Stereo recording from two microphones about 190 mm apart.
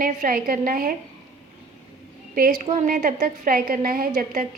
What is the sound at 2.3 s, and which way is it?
A woman's voice, 45° right (ahead or behind).